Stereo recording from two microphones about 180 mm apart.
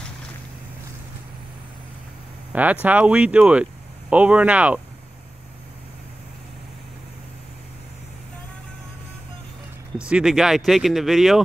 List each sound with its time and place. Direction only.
2.5 s speech: 10° right (ahead or behind)
10.0 s speech: 5° right (ahead or behind)